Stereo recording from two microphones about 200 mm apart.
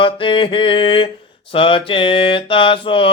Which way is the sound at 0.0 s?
25° left (ahead or behind).